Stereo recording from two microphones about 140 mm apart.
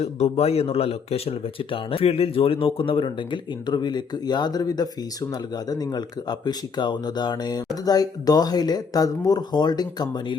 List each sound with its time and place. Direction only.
0.0 s a man's voice: 50° left (ahead or behind); by 10.3 s 30° left (ahead or behind)